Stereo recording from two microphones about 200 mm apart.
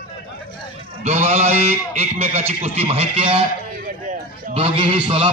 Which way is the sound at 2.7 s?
30° right (ahead or behind).